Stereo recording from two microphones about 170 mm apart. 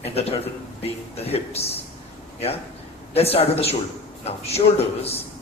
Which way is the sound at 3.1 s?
35° left (ahead or behind).